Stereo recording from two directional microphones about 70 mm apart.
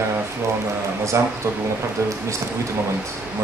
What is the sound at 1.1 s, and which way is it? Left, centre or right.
Speech, right.